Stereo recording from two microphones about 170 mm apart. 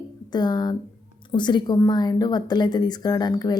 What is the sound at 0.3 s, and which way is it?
Speech, 25° left (ahead or behind).